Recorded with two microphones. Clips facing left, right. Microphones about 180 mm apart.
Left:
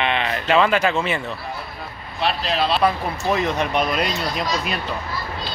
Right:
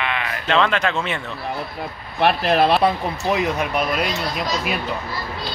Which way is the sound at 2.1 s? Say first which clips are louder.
Right 5 dB; 55° right (ahead or behind).